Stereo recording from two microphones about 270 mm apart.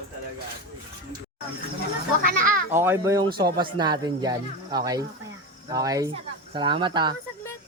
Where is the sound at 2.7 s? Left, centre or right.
Centre.